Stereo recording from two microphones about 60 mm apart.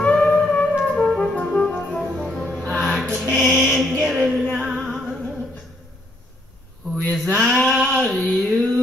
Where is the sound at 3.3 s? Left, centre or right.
Centre.